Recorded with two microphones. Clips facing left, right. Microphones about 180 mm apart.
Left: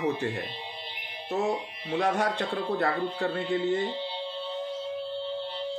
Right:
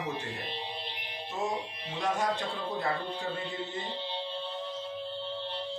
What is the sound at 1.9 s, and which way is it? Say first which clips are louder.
Speech: left 4 dB; 65° left (ahead or behind).